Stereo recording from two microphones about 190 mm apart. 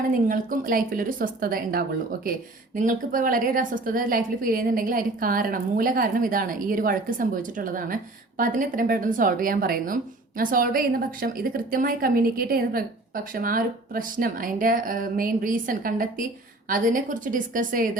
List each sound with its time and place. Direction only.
0.1 s a woman's voice: 45° right (ahead or behind)
2.8 s a woman's voice: 45° right (ahead or behind)